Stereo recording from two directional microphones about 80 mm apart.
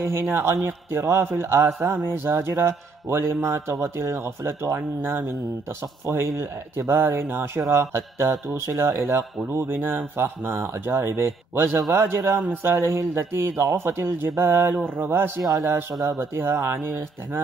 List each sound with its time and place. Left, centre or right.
0.0 s a man's voice: right